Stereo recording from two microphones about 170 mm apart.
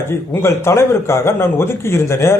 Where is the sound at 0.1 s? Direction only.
15° left (ahead or behind).